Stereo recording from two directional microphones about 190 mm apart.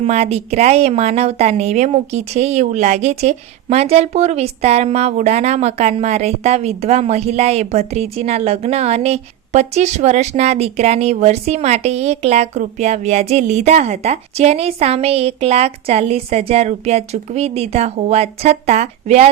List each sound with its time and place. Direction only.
0.0 s a woman's voice: 35° right (ahead or behind)